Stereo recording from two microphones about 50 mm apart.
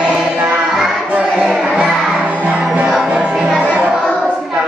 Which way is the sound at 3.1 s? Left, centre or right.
Right.